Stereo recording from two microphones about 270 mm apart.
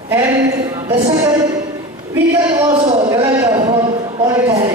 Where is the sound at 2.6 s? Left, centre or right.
Centre.